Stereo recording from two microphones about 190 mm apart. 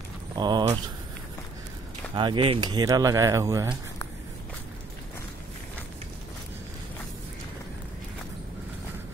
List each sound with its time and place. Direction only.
0.4 s speech: 20° right (ahead or behind)
2.1 s speech: 25° right (ahead or behind)